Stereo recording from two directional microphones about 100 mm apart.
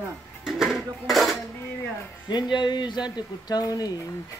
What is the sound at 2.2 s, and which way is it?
Speech, 45° left (ahead or behind).